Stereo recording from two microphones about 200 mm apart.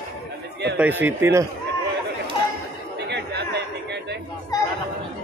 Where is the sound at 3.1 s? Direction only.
60° right (ahead or behind).